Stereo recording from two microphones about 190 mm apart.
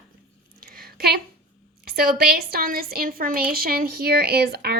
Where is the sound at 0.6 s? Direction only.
55° right (ahead or behind).